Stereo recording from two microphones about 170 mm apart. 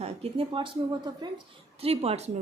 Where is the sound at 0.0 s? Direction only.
35° right (ahead or behind).